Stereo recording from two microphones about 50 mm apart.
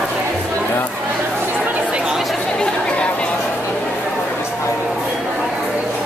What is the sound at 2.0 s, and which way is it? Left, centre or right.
Chatter, centre.